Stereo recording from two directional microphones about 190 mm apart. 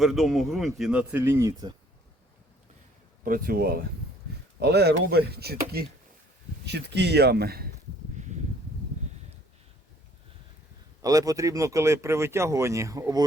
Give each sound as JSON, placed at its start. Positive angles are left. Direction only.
{"t": 0.0, "sound": "speech", "side_deg": 0}
{"t": 3.2, "sound": "speech", "side_deg": -50}
{"t": 8.1, "sound": "a sound", "side_deg": -40}
{"t": 11.0, "sound": "speech", "side_deg": -20}